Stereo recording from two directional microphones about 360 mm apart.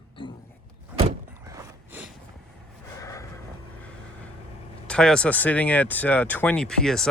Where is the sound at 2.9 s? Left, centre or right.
Centre.